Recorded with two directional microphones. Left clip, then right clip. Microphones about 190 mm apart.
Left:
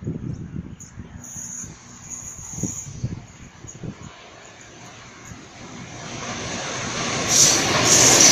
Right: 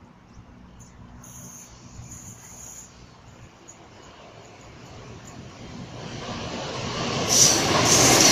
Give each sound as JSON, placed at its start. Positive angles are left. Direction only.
{"t": 6.2, "sound": "vehicle", "side_deg": -15}
{"t": 7.4, "sound": "vehicle", "side_deg": 0}
{"t": 7.8, "sound": "train", "side_deg": 20}